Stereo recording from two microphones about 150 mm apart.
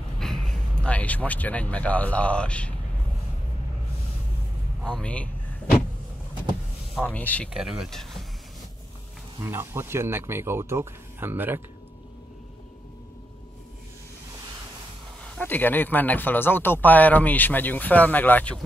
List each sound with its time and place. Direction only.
0.2 s speech: 5° left (ahead or behind)
4.8 s speech: 5° left (ahead or behind)
7.1 s speech: 10° left (ahead or behind)
7.4 s speech: 5° right (ahead or behind)
9.4 s speech: 15° right (ahead or behind)
15.2 s speech: 10° left (ahead or behind)